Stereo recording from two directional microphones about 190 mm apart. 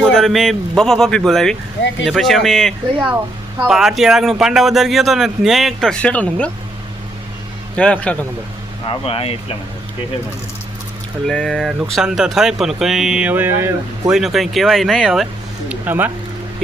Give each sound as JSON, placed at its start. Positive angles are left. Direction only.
{"t": 0.0, "sound": "speech", "side_deg": 0}
{"t": 7.8, "sound": "a man's voice", "side_deg": 5}
{"t": 8.9, "sound": "speech", "side_deg": 30}
{"t": 11.3, "sound": "speech", "side_deg": 5}
{"t": 14.2, "sound": "speech", "side_deg": 0}